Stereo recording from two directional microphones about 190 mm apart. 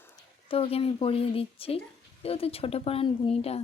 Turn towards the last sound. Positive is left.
turn(degrees=30)  # may be behind; listen again after turning